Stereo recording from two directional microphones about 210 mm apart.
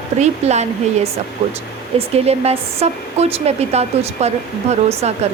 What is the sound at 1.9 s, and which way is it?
Speech, 30° right (ahead or behind).